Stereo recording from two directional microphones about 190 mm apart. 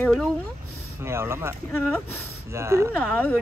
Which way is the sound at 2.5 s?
15° right (ahead or behind).